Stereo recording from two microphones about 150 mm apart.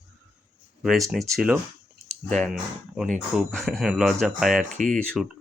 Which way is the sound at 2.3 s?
Centre (ahead or behind).